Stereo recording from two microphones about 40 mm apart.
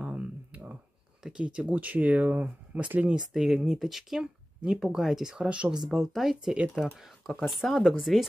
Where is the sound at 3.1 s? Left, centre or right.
Centre.